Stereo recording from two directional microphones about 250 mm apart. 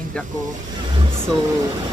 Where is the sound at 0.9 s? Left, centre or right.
Right.